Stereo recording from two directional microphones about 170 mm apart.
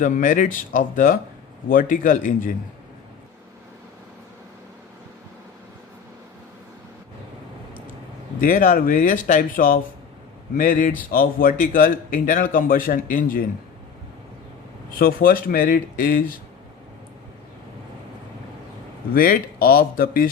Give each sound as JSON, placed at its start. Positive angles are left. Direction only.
{"t": 0.0, "sound": "a man's voice", "side_deg": 50}
{"t": 8.4, "sound": "a man's voice", "side_deg": 55}
{"t": 14.9, "sound": "speech", "side_deg": 55}
{"t": 19.1, "sound": "speech", "side_deg": 60}